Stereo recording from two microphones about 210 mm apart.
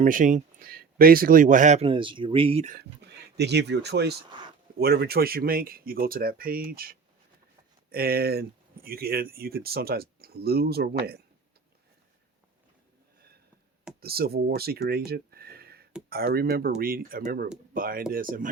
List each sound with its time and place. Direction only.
0.0 s speech: 40° right (ahead or behind)
2.7 s speech: 50° right (ahead or behind)
14.0 s speech: 45° right (ahead or behind)